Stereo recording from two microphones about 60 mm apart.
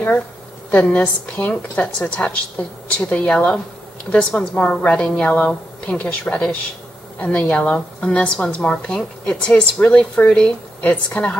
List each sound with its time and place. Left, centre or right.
0.7 s a woman's voice: left